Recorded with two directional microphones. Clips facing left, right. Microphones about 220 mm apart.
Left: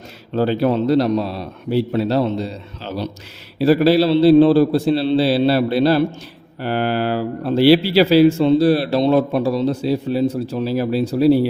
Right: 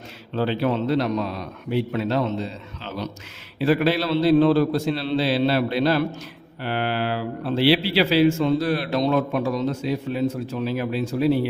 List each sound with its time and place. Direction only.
0.3 s a man's voice: 40° left (ahead or behind)
6.6 s a man's voice: 40° left (ahead or behind)